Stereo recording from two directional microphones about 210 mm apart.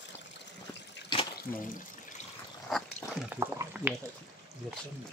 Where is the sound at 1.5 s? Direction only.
40° left (ahead or behind).